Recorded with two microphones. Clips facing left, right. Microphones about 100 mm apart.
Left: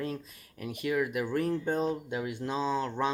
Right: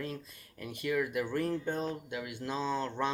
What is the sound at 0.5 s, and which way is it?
Speech, 15° left (ahead or behind).